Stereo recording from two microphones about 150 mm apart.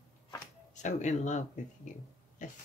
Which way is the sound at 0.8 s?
50° left (ahead or behind).